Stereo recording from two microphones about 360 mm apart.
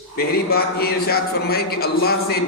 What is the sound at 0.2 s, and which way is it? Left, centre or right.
Speech, left.